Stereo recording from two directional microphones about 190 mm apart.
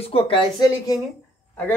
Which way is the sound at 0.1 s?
25° left (ahead or behind).